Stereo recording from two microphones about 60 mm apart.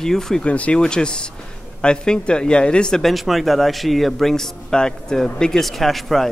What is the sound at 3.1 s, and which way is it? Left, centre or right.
A man's voice, centre.